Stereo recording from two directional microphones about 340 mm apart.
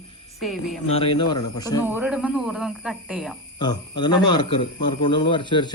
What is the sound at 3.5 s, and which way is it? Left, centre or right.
Speech, centre.